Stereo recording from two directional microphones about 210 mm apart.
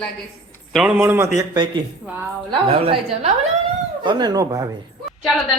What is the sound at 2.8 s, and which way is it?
Speech, 25° right (ahead or behind).